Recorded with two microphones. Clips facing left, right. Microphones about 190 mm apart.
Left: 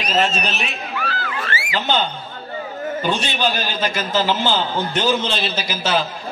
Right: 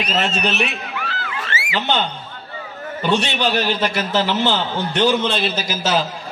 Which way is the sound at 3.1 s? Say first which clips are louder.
Right 4 dB; 65° right (ahead or behind).